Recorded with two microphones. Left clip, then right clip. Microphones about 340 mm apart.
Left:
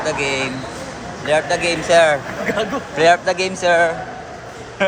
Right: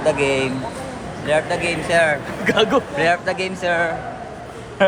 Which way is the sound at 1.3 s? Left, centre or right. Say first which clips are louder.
Left 2 dB; centre.